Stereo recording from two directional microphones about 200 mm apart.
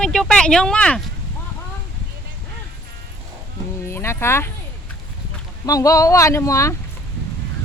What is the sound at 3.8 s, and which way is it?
Speech, 15° left (ahead or behind).